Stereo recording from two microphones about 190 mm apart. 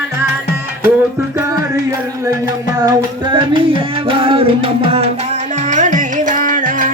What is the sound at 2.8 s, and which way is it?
Music, 20° right (ahead or behind).